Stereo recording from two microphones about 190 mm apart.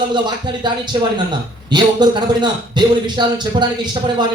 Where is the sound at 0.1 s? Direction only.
25° right (ahead or behind).